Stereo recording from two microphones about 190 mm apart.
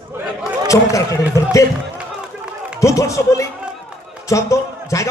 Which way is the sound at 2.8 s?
15° left (ahead or behind).